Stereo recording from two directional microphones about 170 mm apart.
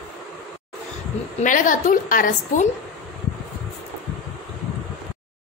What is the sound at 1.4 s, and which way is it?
A woman's voice, 50° left (ahead or behind).